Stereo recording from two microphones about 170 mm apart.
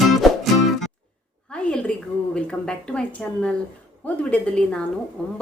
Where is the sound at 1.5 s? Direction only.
5° left (ahead or behind).